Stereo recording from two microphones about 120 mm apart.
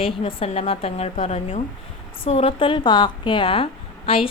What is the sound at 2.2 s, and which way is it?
A woman's voice, 50° left (ahead or behind).